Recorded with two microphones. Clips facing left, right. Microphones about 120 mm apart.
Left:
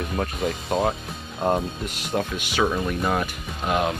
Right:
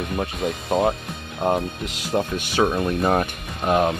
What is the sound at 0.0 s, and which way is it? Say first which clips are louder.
Speech: right 1 dB; centre (ahead or behind).